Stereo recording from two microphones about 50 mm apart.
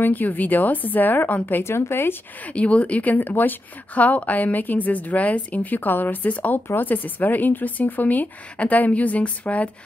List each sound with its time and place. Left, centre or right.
0.0 s speech: left
1.6 s speech: left
2.4 s speech: left